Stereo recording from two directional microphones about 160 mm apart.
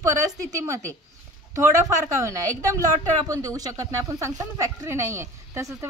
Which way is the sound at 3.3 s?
20° right (ahead or behind).